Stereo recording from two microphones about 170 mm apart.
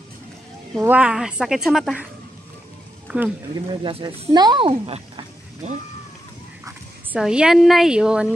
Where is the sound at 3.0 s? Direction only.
10° right (ahead or behind).